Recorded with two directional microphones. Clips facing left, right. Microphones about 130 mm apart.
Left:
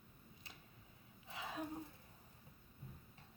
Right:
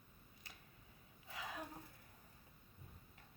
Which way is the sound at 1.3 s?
25° left (ahead or behind).